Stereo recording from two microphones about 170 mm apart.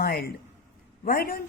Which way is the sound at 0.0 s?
65° left (ahead or behind).